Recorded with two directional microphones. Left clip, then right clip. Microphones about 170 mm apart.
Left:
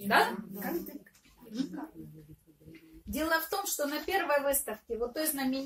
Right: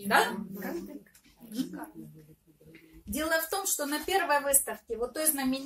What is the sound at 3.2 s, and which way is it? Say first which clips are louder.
A woman's voice: right 1 dB; 20° right (ahead or behind).